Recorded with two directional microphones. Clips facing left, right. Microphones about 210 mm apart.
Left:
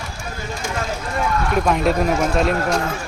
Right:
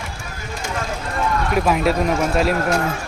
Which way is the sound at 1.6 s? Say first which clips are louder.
Even; 5° right (ahead or behind).